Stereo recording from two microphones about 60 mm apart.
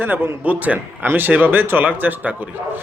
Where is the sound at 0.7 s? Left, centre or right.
Right.